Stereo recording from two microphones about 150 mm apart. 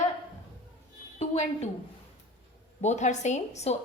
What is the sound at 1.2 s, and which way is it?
Speech, 45° left (ahead or behind).